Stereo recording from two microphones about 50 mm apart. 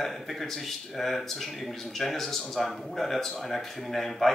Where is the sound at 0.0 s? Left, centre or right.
Centre.